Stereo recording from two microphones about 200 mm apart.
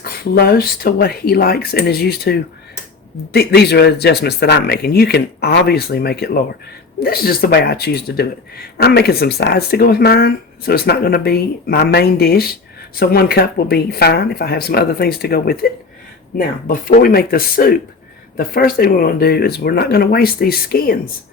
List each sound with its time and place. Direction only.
0.0 s speech: 50° left (ahead or behind)
16.6 s speech: 45° left (ahead or behind)